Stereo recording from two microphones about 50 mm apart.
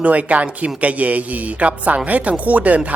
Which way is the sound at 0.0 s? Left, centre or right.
Right.